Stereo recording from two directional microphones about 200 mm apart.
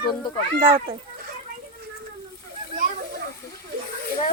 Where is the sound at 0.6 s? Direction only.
25° right (ahead or behind).